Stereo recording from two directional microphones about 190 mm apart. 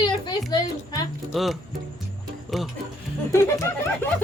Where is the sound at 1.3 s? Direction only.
Centre (ahead or behind).